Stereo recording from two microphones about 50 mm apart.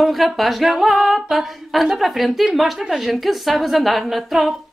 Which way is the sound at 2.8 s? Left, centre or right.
Centre.